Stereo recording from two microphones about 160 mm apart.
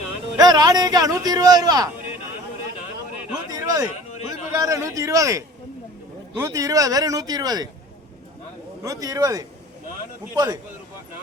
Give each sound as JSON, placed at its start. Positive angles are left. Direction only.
{"t": 0.3, "sound": "speech", "side_deg": -25}
{"t": 3.5, "sound": "a sound", "side_deg": -25}
{"t": 4.5, "sound": "speech", "side_deg": -20}
{"t": 8.8, "sound": "speech", "side_deg": -20}